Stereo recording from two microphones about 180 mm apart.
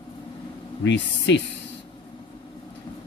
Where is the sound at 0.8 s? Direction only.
80° left.